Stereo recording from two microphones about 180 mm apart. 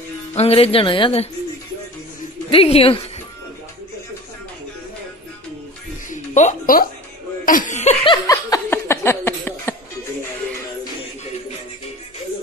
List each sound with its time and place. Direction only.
0.3 s a woman's voice: 35° left (ahead or behind)
2.5 s a woman's voice: 30° left (ahead or behind)
6.0 s music: 45° left (ahead or behind)
7.4 s a woman's voice: 45° left (ahead or behind)
8.3 s laughter: 15° left (ahead or behind)